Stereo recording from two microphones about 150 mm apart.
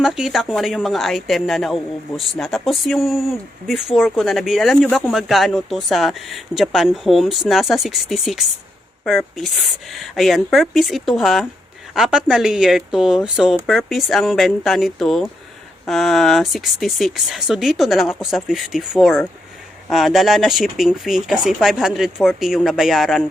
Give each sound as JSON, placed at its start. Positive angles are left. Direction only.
{"t": 0.0, "sound": "a woman's voice", "side_deg": 0}